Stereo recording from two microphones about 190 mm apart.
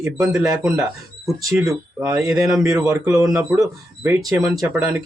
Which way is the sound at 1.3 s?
15° right (ahead or behind).